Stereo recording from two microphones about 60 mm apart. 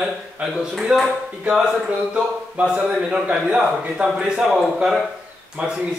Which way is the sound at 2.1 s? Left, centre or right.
Centre.